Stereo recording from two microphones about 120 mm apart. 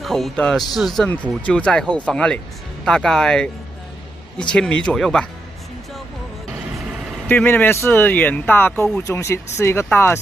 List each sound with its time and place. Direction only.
0.0 s speech: centre (ahead or behind)
1.0 s speech: 10° left (ahead or behind)
7.2 s speech: 15° left (ahead or behind)